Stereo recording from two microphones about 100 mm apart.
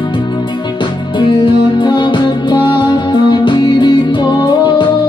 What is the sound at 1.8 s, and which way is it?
Music, 50° left (ahead or behind).